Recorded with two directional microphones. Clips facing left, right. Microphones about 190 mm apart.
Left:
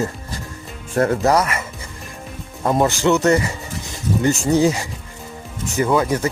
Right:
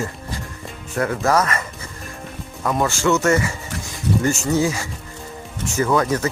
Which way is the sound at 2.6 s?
20° left (ahead or behind).